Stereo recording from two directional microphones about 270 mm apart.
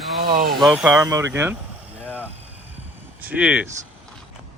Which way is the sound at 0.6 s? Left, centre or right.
Centre.